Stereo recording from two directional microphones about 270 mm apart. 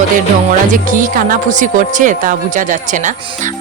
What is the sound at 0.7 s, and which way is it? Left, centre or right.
Speech, right.